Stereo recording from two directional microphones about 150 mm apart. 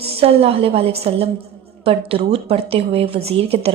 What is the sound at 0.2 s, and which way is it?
A woman's voice, 40° right (ahead or behind).